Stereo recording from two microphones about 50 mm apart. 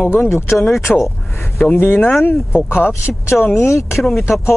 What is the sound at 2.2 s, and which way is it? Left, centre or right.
Speech, left.